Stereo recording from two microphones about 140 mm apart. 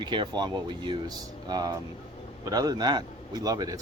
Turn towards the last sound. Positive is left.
turn(degrees=-25)  # may be behind; listen again after turning